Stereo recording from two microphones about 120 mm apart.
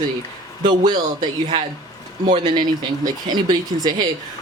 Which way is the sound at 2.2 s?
40° right (ahead or behind).